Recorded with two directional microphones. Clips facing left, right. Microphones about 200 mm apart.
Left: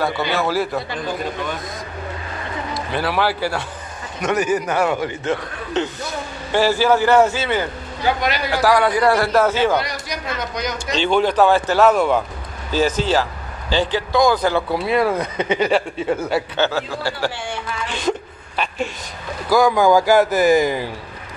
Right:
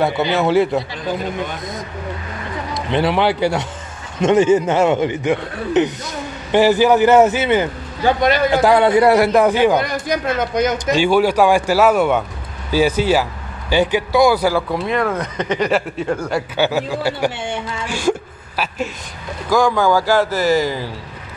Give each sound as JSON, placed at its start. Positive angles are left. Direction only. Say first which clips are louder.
{"t": 0.0, "sound": "a man's voice", "louder": "right 4 dB", "side_deg": -20}
{"t": 2.7, "sound": "a man's voice", "louder": "right 5 dB", "side_deg": -20}
{"t": 9.8, "sound": "speech", "louder": "right 5 dB", "side_deg": -50}
{"t": 11.0, "sound": "a man's voice", "louder": "right 1 dB", "side_deg": -10}
{"t": 14.7, "sound": "speech", "louder": "left 1 dB", "side_deg": 5}
{"t": 16.5, "sound": "a man's voice", "louder": "right 3 dB", "side_deg": -15}
{"t": 17.8, "sound": "speech", "louder": "right 3 dB", "side_deg": -5}
{"t": 19.5, "sound": "speech", "louder": "left 1 dB", "side_deg": 10}